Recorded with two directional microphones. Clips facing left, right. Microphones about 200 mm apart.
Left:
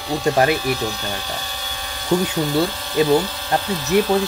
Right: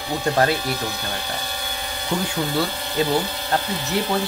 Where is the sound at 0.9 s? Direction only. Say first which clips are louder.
Left 2 dB; 15° right (ahead or behind).